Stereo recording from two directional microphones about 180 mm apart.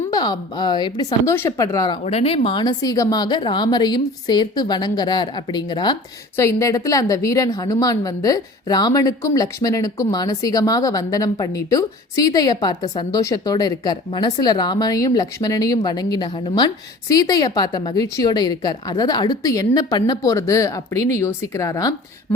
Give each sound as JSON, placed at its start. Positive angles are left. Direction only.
{"t": 0.1, "sound": "a woman's voice", "side_deg": 25}
{"t": 2.0, "sound": "a woman's voice", "side_deg": 35}